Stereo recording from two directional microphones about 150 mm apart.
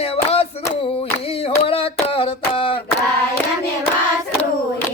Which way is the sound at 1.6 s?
40° left (ahead or behind).